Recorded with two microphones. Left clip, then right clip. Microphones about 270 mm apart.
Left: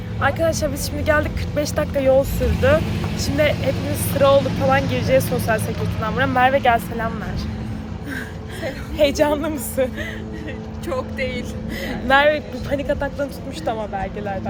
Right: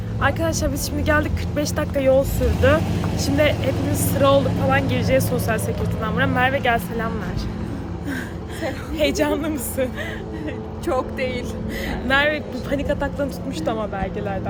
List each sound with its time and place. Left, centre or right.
0.2 s speech: centre
3.8 s speech: right
4.1 s speech: centre
8.6 s a woman's voice: centre
10.8 s speech: right
11.9 s speech: centre